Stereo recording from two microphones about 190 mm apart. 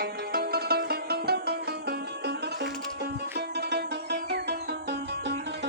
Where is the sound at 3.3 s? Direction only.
60° right (ahead or behind).